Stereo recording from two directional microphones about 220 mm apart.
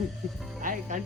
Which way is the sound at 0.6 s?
35° right (ahead or behind).